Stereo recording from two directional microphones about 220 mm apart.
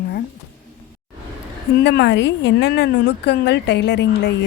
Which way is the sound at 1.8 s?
50° left (ahead or behind).